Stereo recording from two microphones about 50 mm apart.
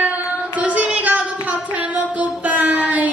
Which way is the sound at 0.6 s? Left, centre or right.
Right.